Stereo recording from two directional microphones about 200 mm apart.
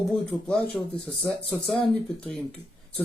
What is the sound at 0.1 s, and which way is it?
Speech, 5° left (ahead or behind).